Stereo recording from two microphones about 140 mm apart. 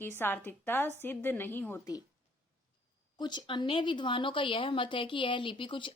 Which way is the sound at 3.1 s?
30° left (ahead or behind).